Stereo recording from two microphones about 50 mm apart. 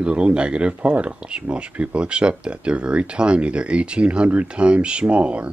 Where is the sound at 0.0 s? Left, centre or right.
Right.